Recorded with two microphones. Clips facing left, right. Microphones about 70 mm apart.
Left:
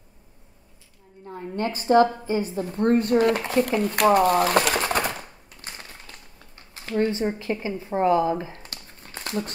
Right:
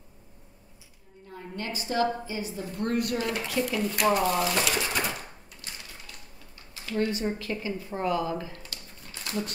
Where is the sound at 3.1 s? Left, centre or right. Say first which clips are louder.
Left 10 dB; left.